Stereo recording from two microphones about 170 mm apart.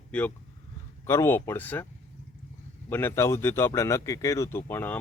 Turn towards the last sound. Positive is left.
turn(degrees=15)  # may be behind; listen again after turning